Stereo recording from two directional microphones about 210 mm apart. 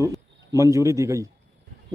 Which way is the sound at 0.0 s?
15° right (ahead or behind).